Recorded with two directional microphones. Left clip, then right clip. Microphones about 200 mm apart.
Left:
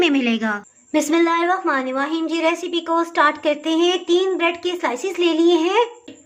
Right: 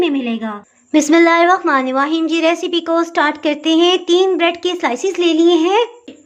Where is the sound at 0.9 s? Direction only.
25° right (ahead or behind).